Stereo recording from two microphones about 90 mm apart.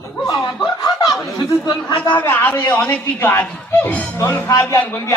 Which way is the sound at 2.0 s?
20° left (ahead or behind).